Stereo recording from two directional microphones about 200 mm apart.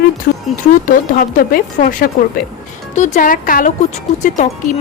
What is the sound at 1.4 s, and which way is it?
A woman's voice, 45° left (ahead or behind).